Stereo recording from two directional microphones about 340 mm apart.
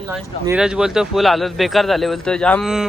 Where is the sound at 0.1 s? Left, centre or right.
Centre.